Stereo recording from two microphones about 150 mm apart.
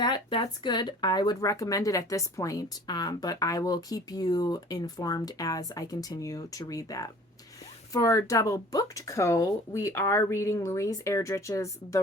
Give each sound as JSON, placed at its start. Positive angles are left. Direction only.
{"t": 0.0, "sound": "speech", "side_deg": 30}